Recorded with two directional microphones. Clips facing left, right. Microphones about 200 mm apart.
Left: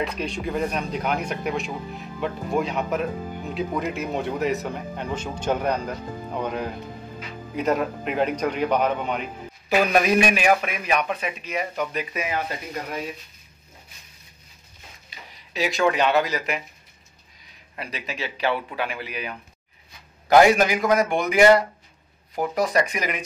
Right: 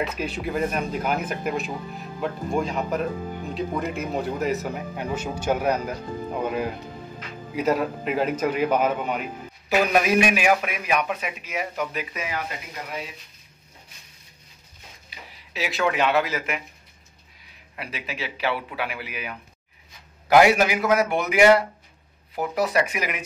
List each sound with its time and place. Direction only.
0.0 s speech: 5° right (ahead or behind)
7.5 s speech: 5° right (ahead or behind)
12.3 s speech: 30° left (ahead or behind)
15.0 s speech: 5° right (ahead or behind)
17.7 s a man's voice: 5° right (ahead or behind)